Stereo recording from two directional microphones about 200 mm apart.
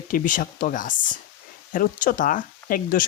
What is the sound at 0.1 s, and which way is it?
Speech, 40° left (ahead or behind).